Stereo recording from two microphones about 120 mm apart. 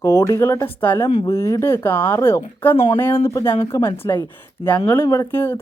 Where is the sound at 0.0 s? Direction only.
25° left (ahead or behind).